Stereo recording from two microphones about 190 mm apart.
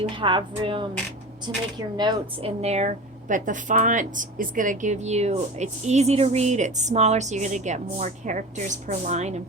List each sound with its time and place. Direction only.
0.0 s a woman's voice: 25° right (ahead or behind)
2.6 s speech: 35° right (ahead or behind)